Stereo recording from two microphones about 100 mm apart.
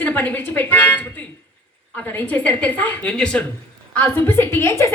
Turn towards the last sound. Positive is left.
turn(degrees=25)  # may be behind; listen again after turning